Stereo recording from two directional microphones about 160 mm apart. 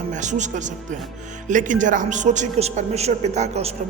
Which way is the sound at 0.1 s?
50° right (ahead or behind).